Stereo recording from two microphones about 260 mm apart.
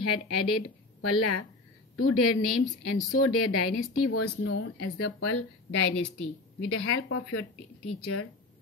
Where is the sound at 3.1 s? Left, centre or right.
Left.